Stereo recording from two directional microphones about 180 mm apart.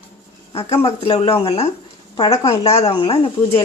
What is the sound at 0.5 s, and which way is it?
Speech, 30° left (ahead or behind).